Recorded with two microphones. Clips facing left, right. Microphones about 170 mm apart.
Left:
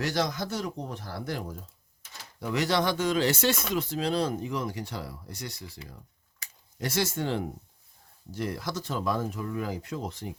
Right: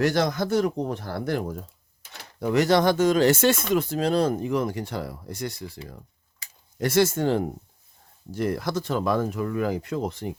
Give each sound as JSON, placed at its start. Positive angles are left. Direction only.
{"t": 0.0, "sound": "speech", "side_deg": -55}